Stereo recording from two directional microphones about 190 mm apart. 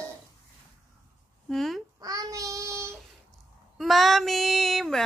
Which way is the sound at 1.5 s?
Centre (ahead or behind).